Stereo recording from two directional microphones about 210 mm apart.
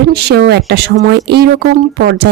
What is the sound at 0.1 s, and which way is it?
Speech, 50° right (ahead or behind).